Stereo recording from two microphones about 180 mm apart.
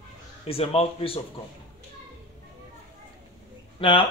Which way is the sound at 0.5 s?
35° left (ahead or behind).